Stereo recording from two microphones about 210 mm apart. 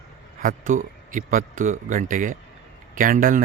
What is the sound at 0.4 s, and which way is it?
Speech, 40° right (ahead or behind).